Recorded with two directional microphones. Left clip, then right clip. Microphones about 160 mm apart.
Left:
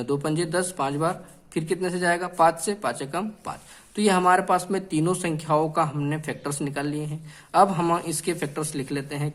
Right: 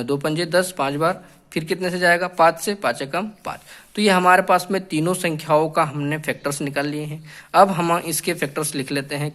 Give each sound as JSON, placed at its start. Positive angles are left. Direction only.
{"t": 0.0, "sound": "speech", "side_deg": -20}